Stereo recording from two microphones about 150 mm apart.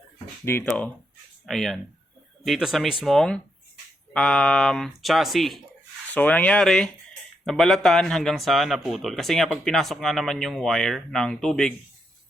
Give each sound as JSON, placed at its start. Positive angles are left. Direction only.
{"t": 0.4, "sound": "speech", "side_deg": 15}
{"t": 1.5, "sound": "speech", "side_deg": 0}